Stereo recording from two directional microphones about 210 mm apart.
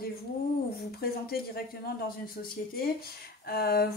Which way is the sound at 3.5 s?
50° left (ahead or behind).